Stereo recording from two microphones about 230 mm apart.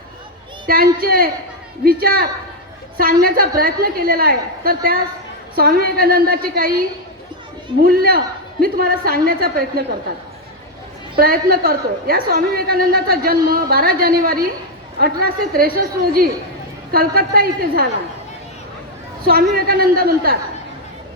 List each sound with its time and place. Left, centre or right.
0.7 s a woman's voice: right
11.2 s a woman's voice: right
19.2 s a woman's voice: right